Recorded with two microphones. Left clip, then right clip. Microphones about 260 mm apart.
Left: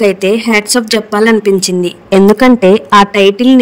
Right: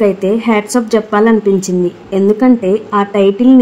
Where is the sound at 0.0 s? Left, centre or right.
Left.